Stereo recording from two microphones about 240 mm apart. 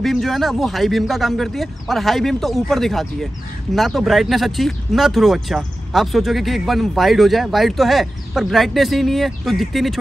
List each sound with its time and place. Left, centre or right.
0.0 s speech: centre